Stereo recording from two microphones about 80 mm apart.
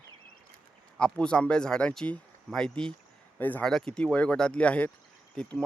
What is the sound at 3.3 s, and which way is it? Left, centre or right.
Speech, left.